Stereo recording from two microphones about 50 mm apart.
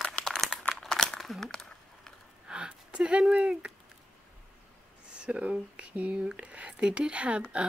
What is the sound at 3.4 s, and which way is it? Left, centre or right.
Speech, right.